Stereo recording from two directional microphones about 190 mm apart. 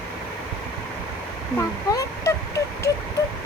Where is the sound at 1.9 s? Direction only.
15° left (ahead or behind).